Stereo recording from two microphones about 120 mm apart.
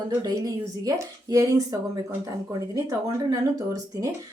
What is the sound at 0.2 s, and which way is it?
Speech, 30° right (ahead or behind).